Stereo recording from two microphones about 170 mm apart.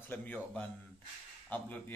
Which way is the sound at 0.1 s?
10° left (ahead or behind).